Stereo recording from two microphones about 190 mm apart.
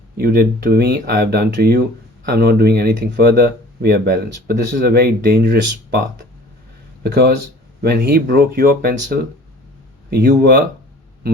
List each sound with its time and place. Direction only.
0.2 s speech: 55° right (ahead or behind)
7.0 s speech: 55° right (ahead or behind)
10.1 s speech: 55° right (ahead or behind)